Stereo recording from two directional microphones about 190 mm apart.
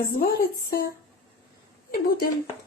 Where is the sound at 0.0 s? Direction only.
50° left (ahead or behind).